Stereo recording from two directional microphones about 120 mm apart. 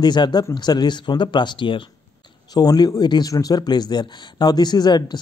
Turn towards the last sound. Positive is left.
turn(degrees=35)  # may be behind; listen again after turning